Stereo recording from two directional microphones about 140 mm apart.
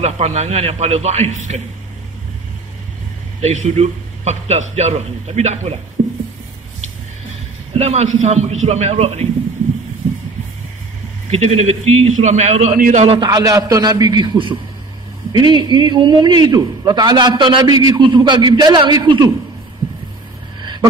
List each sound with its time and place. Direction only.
0.0 s a man's voice: 50° right (ahead or behind)
3.3 s a man's voice: 50° right (ahead or behind)
7.7 s a man's voice: 50° right (ahead or behind)
11.2 s a man's voice: 50° right (ahead or behind)
12.7 s a man's voice: 90° right
13.0 s a man's voice: 30° right (ahead or behind)